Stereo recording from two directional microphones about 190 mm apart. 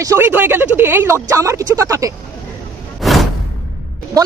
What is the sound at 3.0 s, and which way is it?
Music, centre (ahead or behind).